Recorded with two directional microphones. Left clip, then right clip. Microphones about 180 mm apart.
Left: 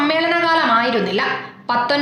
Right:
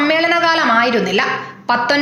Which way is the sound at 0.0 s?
10° right (ahead or behind).